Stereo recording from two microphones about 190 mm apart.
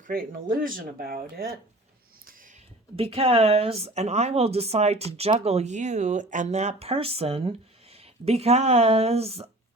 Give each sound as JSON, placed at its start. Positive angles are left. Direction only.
{"t": 0.1, "sound": "speech", "side_deg": -50}
{"t": 2.9, "sound": "speech", "side_deg": -30}